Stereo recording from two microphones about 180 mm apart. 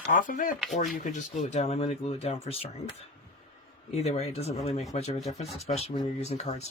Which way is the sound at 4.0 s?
35° left (ahead or behind).